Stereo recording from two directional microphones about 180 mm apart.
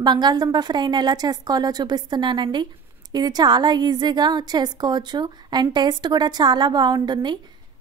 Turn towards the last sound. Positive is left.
turn(degrees=-25)  # may be behind; listen again after turning